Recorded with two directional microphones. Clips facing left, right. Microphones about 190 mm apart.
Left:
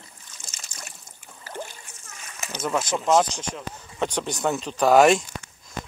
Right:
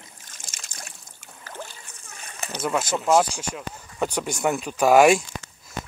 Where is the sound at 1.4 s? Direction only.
15° left (ahead or behind).